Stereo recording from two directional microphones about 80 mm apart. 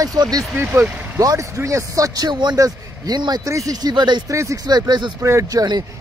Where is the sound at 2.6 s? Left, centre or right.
Right.